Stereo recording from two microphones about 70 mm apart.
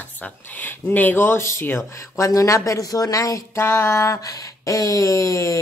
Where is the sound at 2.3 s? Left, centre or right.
Left.